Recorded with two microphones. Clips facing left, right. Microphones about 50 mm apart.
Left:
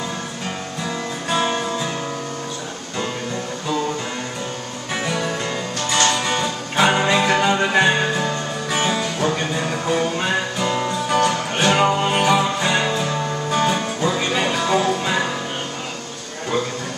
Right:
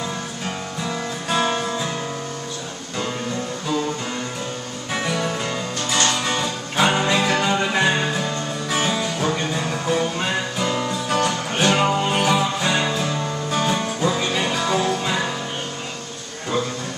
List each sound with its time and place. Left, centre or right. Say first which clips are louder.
1.3 s music: even; centre
4.9 s music: even; centre